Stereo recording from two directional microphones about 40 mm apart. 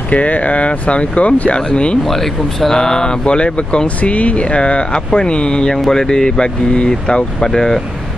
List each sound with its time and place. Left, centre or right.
0.1 s speech: left
2.0 s speech: centre; by 7.2 s left
7.3 s speech: centre